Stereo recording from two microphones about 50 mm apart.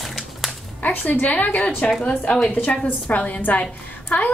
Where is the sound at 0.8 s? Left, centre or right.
Left.